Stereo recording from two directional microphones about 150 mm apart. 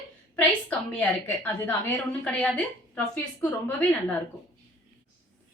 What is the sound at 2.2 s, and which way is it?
A woman's voice, 5° left (ahead or behind).